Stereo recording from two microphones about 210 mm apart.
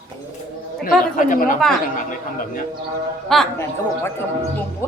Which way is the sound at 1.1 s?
40° left (ahead or behind).